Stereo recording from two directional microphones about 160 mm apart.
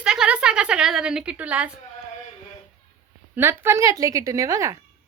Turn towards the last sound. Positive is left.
turn(degrees=-20)  # may be behind; listen again after turning